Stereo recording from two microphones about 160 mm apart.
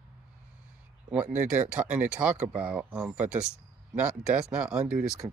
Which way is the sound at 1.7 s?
5° right (ahead or behind).